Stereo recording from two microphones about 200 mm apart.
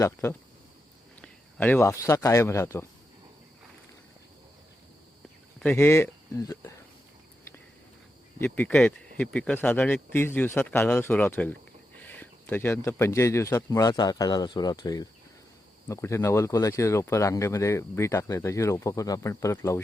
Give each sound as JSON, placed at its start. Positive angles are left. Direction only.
{"t": 0.0, "sound": "speech", "side_deg": 10}
{"t": 5.5, "sound": "speech", "side_deg": 10}
{"t": 8.4, "sound": "speech", "side_deg": 10}